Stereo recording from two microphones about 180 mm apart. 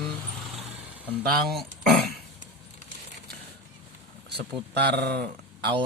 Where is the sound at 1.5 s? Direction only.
Centre (ahead or behind).